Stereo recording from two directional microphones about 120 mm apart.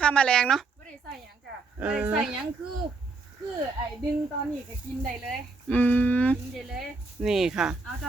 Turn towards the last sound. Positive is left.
turn(degrees=-5)  # may be behind; listen again after turning